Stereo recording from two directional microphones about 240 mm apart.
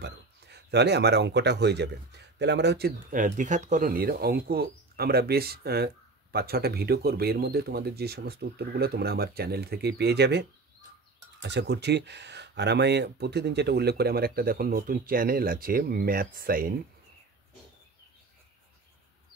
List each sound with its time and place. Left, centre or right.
0.0 s speech: right
11.4 s speech: right